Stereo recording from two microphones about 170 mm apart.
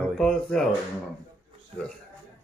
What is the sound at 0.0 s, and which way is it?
Speech, 5° left (ahead or behind).